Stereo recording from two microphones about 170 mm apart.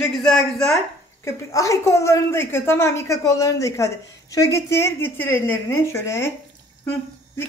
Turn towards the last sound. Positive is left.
turn(degrees=15)  # may be behind; listen again after turning